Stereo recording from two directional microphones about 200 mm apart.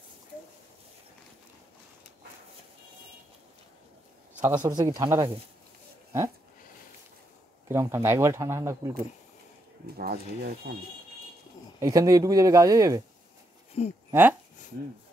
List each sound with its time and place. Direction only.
4.4 s speech: 15° right (ahead or behind)
7.6 s speech: 15° right (ahead or behind)
9.9 s speech: 50° right (ahead or behind)
11.8 s speech: 15° right (ahead or behind)
13.8 s speech: 30° left (ahead or behind)